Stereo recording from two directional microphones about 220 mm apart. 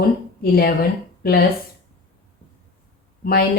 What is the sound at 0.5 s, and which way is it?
Speech, 45° left (ahead or behind).